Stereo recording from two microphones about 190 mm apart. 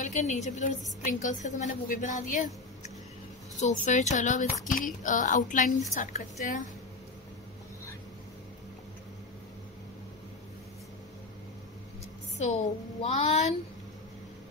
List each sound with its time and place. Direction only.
0.0 s a woman's voice: 40° left (ahead or behind)
12.4 s a woman's voice: 40° left (ahead or behind)